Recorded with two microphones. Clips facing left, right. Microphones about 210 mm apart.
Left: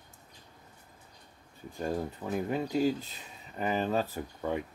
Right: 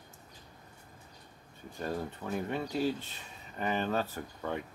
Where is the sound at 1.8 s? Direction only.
15° left (ahead or behind).